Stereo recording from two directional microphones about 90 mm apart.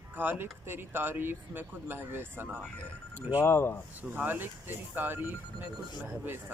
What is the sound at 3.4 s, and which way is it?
Speech, 25° left (ahead or behind).